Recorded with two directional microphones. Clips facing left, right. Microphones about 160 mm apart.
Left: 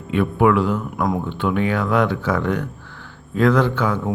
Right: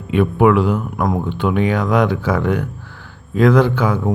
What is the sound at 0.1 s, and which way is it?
Speech, 20° right (ahead or behind).